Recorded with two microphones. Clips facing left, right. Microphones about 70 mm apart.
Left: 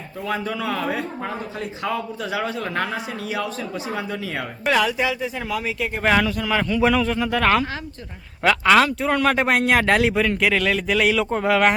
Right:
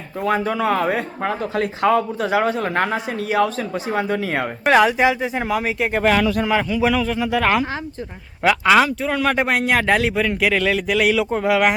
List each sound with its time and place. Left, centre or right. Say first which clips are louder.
0.3 s speech: right 6 dB; right
1.3 s speech: right 7 dB; right
4.9 s speech: right 5 dB; right
6.5 s a man's voice: right 1 dB; centre